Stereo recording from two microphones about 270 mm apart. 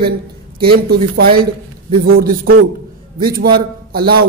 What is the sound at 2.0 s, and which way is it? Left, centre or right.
A man's voice, right.